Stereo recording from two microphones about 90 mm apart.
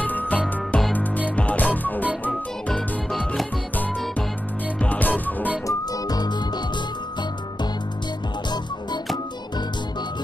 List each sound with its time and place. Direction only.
0.0 s music: 20° left (ahead or behind)
3.1 s music: 5° left (ahead or behind)
4.8 s music: 20° left (ahead or behind)
5.7 s music: 50° left (ahead or behind)